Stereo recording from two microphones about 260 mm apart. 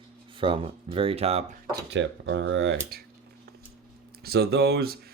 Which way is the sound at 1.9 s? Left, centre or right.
Right.